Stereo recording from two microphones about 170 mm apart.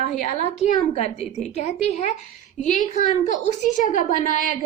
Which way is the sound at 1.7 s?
40° left (ahead or behind).